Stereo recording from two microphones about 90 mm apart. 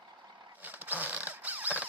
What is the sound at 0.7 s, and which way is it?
Zipper, 20° right (ahead or behind).